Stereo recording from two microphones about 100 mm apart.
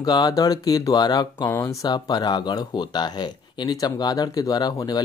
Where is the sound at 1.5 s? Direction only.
30° left (ahead or behind).